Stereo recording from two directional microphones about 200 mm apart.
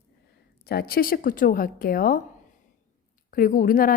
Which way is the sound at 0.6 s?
50° left (ahead or behind).